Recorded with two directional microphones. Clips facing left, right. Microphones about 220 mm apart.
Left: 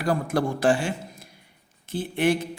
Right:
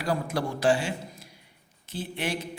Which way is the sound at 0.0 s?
50° left (ahead or behind).